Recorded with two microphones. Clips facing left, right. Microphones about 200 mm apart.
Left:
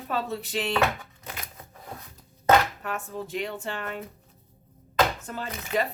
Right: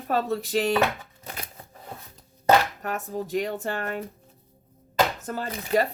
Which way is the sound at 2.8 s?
40° right (ahead or behind).